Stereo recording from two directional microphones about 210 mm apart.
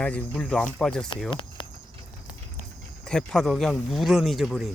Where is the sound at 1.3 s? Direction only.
25° left (ahead or behind).